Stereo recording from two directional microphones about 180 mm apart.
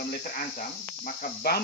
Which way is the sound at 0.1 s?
50° left (ahead or behind).